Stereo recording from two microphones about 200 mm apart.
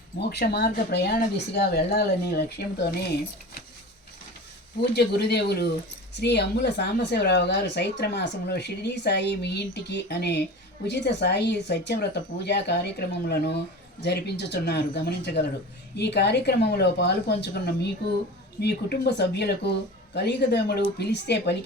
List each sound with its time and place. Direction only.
0.2 s speech: 55° left (ahead or behind)
4.8 s speech: 55° left (ahead or behind)